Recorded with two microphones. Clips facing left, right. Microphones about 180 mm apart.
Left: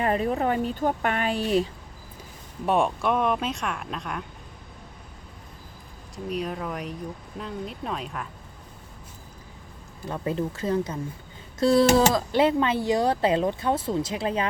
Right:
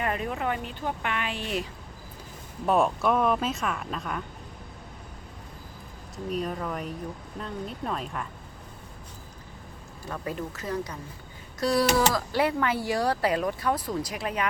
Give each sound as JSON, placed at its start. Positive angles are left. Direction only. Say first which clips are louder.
{"t": 0.0, "sound": "speech", "louder": "left 5 dB", "side_deg": 35}
{"t": 2.6, "sound": "speech", "louder": "even", "side_deg": 0}
{"t": 6.3, "sound": "speech", "louder": "even", "side_deg": 0}
{"t": 10.1, "sound": "speech", "louder": "left 5 dB", "side_deg": 25}